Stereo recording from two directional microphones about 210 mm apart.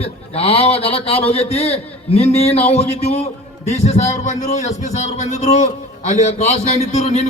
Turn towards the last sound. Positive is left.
turn(degrees=30)  # may be behind; listen again after turning